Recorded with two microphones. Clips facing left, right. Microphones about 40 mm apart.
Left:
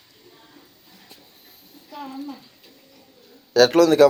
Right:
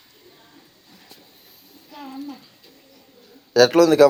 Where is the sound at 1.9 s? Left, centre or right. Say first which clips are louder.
Left 1 dB; centre.